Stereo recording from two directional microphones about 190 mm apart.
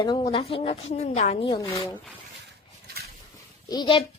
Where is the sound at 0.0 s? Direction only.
25° left (ahead or behind).